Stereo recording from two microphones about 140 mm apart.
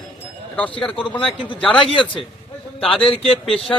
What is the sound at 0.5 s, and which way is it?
Speech, 10° left (ahead or behind).